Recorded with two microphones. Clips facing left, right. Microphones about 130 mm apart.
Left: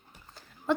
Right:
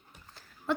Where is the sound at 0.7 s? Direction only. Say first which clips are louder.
Left 3 dB; centre (ahead or behind).